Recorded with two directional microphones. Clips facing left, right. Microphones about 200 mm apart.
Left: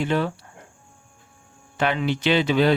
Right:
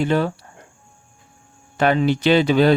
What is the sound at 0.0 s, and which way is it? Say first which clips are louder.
Speech: right 4 dB; 40° right (ahead or behind).